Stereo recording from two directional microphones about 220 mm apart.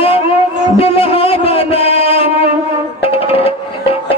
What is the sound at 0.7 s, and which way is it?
Music, 25° left (ahead or behind).